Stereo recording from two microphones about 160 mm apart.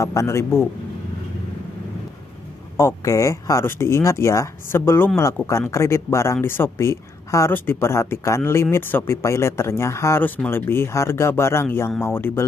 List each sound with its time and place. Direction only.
0.0 s speech: 20° left (ahead or behind)
2.8 s speech: 20° left (ahead or behind)